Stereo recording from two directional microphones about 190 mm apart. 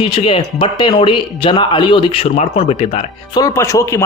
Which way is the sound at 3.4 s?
15° left (ahead or behind).